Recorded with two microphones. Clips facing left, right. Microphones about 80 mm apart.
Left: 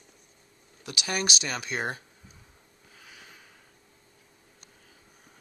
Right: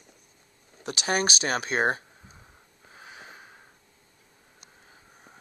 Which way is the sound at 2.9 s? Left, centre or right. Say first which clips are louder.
Right 6 dB; right.